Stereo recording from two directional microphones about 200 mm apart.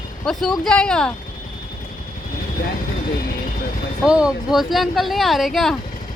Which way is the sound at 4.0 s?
5° right (ahead or behind).